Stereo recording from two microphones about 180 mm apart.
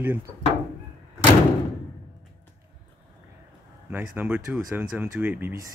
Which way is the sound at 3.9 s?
10° right (ahead or behind).